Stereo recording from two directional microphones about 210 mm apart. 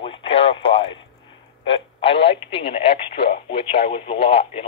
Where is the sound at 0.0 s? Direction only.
25° left (ahead or behind).